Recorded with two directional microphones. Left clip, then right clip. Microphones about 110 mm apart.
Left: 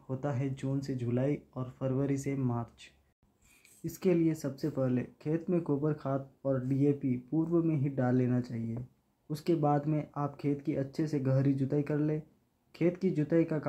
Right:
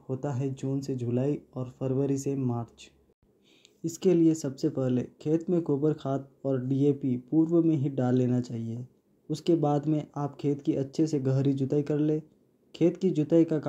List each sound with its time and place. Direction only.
0.1 s speech: 30° right (ahead or behind)
3.8 s speech: 15° right (ahead or behind)
7.6 s speech: 45° right (ahead or behind)
7.9 s speech: 20° right (ahead or behind)